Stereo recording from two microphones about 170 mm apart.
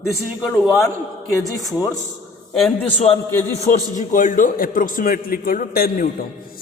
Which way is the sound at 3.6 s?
50° left (ahead or behind).